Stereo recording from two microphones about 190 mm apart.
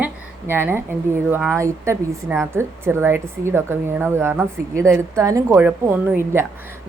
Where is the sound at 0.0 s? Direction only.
10° right (ahead or behind).